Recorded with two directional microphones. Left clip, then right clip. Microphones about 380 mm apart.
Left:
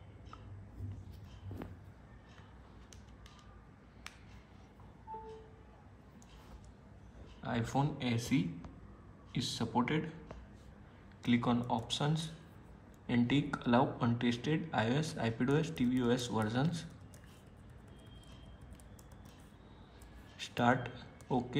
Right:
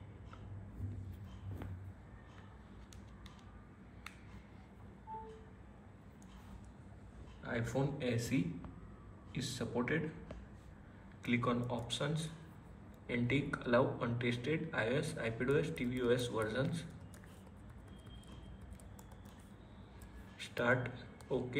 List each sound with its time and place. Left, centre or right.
7.4 s speech: centre
11.2 s speech: centre
20.3 s speech: centre